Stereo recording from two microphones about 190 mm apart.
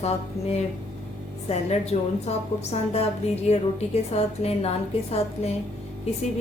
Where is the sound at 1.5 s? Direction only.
35° left (ahead or behind).